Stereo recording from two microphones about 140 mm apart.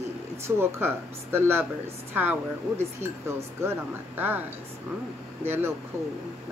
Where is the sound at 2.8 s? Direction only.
20° right (ahead or behind).